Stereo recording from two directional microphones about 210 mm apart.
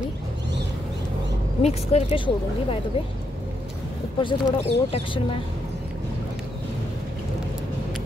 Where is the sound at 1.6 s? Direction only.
30° left (ahead or behind).